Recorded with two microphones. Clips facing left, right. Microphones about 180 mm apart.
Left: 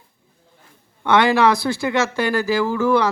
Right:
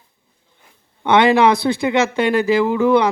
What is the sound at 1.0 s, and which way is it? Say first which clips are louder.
A man's voice: right 3 dB; 20° right (ahead or behind).